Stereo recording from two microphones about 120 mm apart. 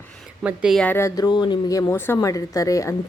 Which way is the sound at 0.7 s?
10° left (ahead or behind).